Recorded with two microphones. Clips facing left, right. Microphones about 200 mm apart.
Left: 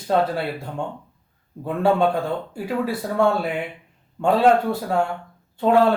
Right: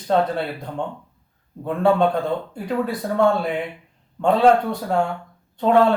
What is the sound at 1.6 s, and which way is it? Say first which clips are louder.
A man's voice: right 1 dB; 5° left (ahead or behind).